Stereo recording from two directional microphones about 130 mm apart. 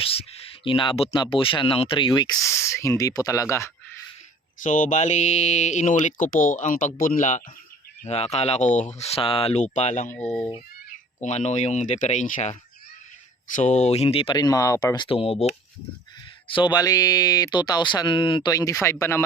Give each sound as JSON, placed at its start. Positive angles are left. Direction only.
{"t": 0.0, "sound": "speech", "side_deg": 45}
{"t": 4.6, "sound": "speech", "side_deg": 80}
{"t": 6.4, "sound": "speech", "side_deg": 90}
{"t": 8.0, "sound": "speech", "side_deg": 55}
{"t": 10.1, "sound": "speech", "side_deg": 10}
{"t": 11.2, "sound": "speech", "side_deg": 60}
{"t": 13.6, "sound": "speech", "side_deg": 65}
{"t": 14.3, "sound": "speech", "side_deg": 30}
{"t": 16.7, "sound": "speech", "side_deg": 30}